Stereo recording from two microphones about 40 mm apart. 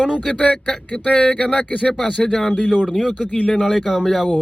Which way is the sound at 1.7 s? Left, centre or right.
Left.